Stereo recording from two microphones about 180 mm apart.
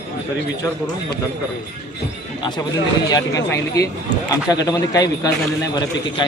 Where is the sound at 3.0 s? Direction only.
20° left (ahead or behind).